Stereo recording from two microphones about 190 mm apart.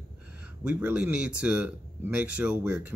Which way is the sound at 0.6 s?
10° right (ahead or behind).